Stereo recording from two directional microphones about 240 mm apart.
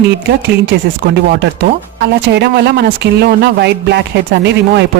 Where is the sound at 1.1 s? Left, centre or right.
Right.